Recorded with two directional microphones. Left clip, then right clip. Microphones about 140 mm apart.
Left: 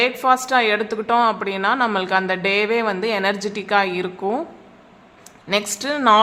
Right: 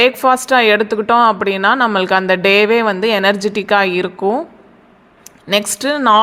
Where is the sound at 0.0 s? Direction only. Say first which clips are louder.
Right 5 dB; 35° right (ahead or behind).